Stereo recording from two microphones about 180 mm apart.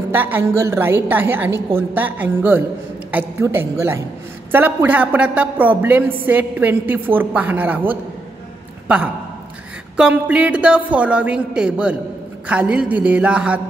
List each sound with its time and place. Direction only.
0.1 s a woman's voice: 10° right (ahead or behind)